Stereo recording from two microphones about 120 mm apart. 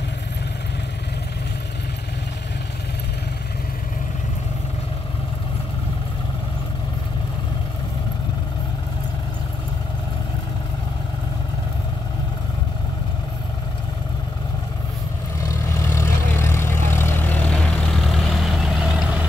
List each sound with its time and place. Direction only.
15.4 s vehicle: 25° left (ahead or behind); by 19.2 s 5° right (ahead or behind)